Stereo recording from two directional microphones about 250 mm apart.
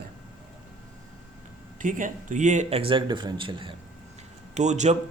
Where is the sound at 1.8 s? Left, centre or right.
Right.